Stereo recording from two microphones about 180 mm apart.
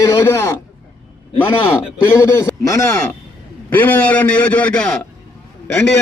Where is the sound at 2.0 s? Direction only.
15° left (ahead or behind).